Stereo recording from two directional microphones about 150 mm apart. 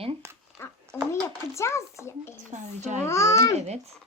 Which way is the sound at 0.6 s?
15° left (ahead or behind).